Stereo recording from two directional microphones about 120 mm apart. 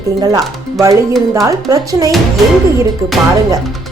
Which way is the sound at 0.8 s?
25° right (ahead or behind).